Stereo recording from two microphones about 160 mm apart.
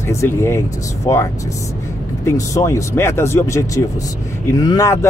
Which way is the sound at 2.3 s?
20° left (ahead or behind).